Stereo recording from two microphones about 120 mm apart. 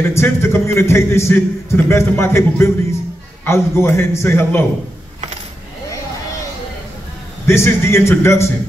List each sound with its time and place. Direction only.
0.1 s a man's voice: 20° left (ahead or behind)
7.4 s a man's voice: 20° left (ahead or behind)